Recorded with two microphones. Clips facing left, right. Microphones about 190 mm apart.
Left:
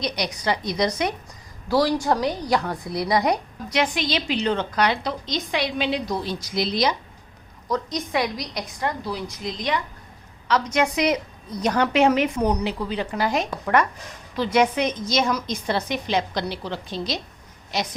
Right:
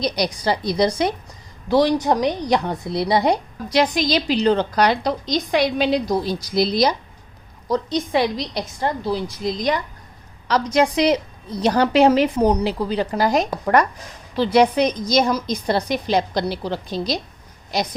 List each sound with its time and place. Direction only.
0.0 s a woman's voice: 35° right (ahead or behind)